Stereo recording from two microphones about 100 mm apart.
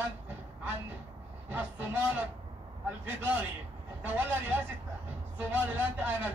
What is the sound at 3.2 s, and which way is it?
Speech, 20° right (ahead or behind).